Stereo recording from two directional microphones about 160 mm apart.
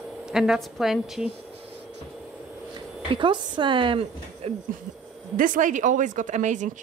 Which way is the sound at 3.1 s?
30° right (ahead or behind).